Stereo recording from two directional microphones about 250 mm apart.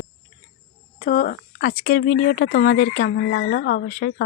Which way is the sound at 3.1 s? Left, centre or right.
Left.